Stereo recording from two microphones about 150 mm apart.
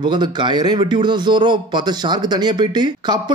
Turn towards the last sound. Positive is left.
turn(degrees=-30)  # may be behind; listen again after turning